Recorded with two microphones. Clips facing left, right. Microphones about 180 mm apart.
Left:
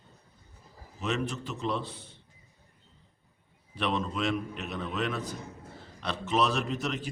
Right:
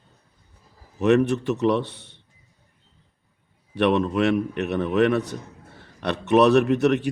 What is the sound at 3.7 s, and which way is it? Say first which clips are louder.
A man's voice: right 11 dB; 65° right (ahead or behind).